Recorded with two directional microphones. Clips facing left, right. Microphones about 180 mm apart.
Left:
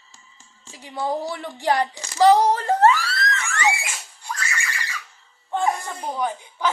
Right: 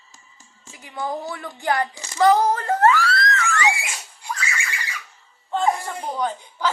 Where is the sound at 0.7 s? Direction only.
30° left (ahead or behind).